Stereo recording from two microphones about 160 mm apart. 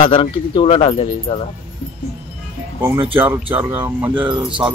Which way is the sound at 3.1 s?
10° right (ahead or behind).